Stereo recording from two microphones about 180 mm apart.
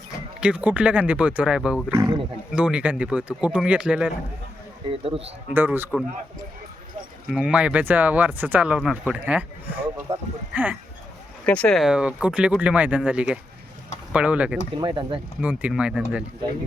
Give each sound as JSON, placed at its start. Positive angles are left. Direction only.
{"t": 0.3, "sound": "speech", "side_deg": -5}
{"t": 1.9, "sound": "speech", "side_deg": -20}
{"t": 2.5, "sound": "speech", "side_deg": -5}
{"t": 4.9, "sound": "a man's voice", "side_deg": -30}
{"t": 5.5, "sound": "speech", "side_deg": -10}
{"t": 7.3, "sound": "speech", "side_deg": -5}
{"t": 11.4, "sound": "speech", "side_deg": 5}
{"t": 14.8, "sound": "speech", "side_deg": -25}
{"t": 15.4, "sound": "speech", "side_deg": -10}